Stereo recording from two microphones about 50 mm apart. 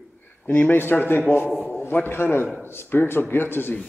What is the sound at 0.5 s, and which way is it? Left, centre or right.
Speech, left.